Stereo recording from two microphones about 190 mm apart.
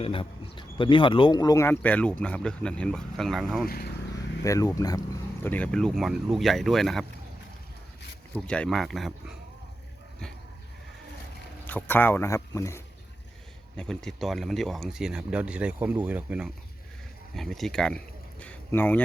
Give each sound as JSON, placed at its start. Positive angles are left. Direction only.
{"t": 0.0, "sound": "speech", "side_deg": 30}
{"t": 3.7, "sound": "speech", "side_deg": 55}
{"t": 4.4, "sound": "speech", "side_deg": 15}
{"t": 5.4, "sound": "speech", "side_deg": 10}
{"t": 8.4, "sound": "speech", "side_deg": 5}
{"t": 11.6, "sound": "speech", "side_deg": 10}
{"t": 13.7, "sound": "speech", "side_deg": 5}